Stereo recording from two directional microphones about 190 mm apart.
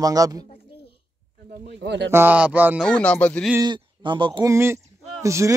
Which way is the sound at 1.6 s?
60° right (ahead or behind).